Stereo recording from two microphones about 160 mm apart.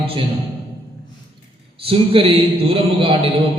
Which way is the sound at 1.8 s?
35° right (ahead or behind).